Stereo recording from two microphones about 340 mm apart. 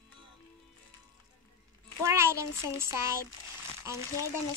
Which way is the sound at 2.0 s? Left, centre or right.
Centre.